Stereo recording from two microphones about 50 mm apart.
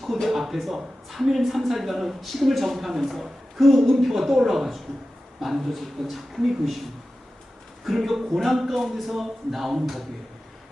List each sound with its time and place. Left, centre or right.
0.0 s speech: centre
7.9 s speech: centre